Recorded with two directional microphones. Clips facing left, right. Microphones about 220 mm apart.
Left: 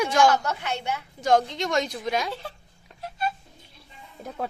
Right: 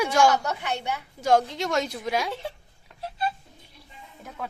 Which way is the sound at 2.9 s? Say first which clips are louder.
Even; 30° right (ahead or behind).